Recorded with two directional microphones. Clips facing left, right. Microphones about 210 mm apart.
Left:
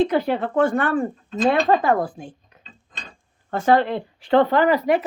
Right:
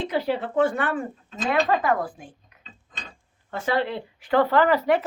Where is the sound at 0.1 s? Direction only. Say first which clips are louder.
Left 4 dB; 50° left (ahead or behind).